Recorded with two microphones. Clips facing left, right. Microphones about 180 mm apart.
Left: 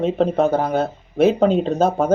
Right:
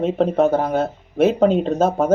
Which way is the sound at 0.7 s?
35° left (ahead or behind).